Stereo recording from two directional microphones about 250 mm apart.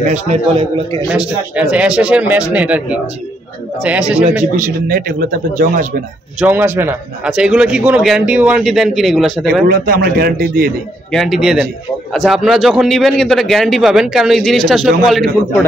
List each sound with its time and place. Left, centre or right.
0.1 s a man's voice: right
1.1 s a man's voice: centre
4.6 s a man's voice: right
6.4 s a man's voice: centre
9.7 s a man's voice: right
11.1 s a man's voice: centre